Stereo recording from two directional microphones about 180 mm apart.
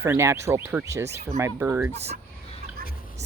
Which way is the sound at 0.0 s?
15° right (ahead or behind).